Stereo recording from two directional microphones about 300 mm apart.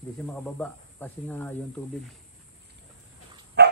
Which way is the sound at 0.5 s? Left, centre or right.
Centre.